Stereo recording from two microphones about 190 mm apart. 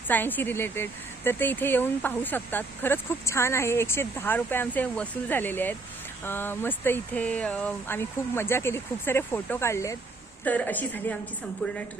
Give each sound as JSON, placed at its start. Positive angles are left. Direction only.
{"t": 0.1, "sound": "speech", "side_deg": 10}